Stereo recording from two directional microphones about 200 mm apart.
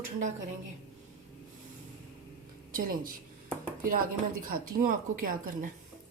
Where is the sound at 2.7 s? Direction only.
45° right (ahead or behind).